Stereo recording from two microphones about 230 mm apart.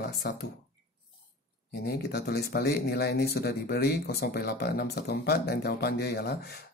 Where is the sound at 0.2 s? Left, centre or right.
Left.